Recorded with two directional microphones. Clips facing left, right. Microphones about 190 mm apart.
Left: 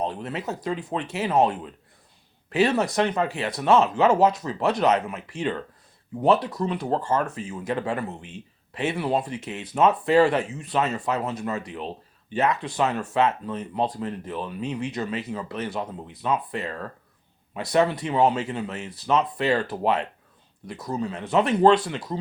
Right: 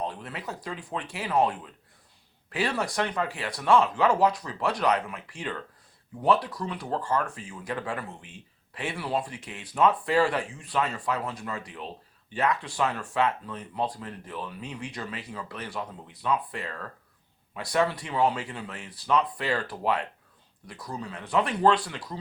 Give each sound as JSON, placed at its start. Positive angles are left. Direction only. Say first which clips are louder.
{"t": 0.0, "sound": "speech", "louder": "left 5 dB", "side_deg": 25}